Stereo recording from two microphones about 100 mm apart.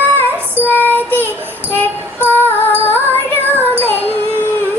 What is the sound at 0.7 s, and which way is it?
Child singing, 20° left (ahead or behind).